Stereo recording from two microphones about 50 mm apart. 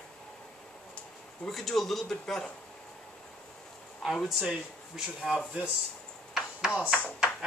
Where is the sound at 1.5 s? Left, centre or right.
Centre.